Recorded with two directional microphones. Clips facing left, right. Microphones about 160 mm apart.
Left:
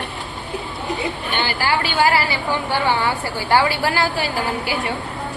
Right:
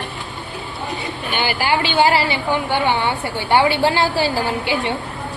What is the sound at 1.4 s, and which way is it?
A woman's voice, 20° right (ahead or behind).